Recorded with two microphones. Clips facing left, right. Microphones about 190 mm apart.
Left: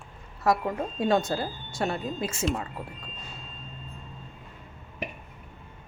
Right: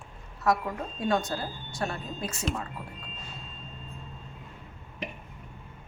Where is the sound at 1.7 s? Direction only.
20° left (ahead or behind).